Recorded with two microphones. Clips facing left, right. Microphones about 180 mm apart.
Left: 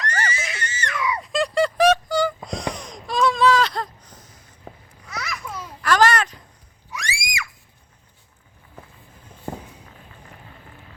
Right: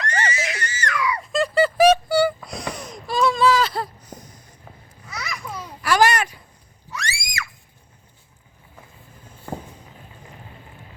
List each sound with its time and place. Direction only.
0.1 s screaming: 30° right (ahead or behind)
0.6 s screaming: 25° left (ahead or behind)
1.2 s music: centre (ahead or behind)
2.5 s a sound: 5° right (ahead or behind)
4.7 s babbling: 55° left (ahead or behind)
5.0 s babbling: centre (ahead or behind)
6.9 s screaming: 15° left (ahead or behind)